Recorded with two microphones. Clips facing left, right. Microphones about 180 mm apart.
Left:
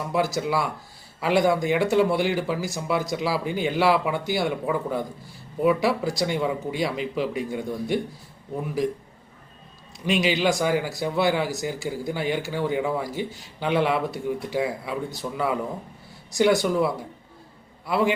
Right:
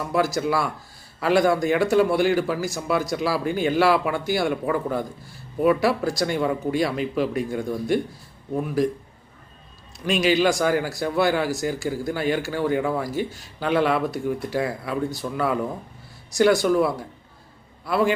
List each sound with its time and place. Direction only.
0.1 s speech: 20° left (ahead or behind)
10.1 s speech: 20° left (ahead or behind)